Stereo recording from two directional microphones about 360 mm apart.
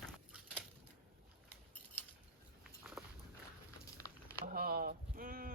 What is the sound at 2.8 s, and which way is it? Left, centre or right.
Walk, centre.